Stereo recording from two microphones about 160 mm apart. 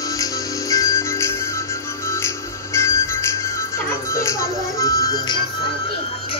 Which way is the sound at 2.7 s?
15° left (ahead or behind).